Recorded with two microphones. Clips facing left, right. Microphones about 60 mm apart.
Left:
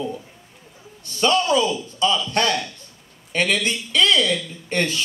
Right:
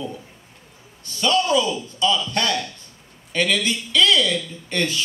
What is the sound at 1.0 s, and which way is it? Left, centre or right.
A man's voice, left.